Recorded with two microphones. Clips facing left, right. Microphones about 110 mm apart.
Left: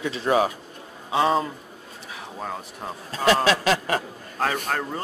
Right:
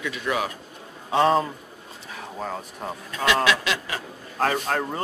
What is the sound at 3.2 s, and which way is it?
Speech, 40° left (ahead or behind).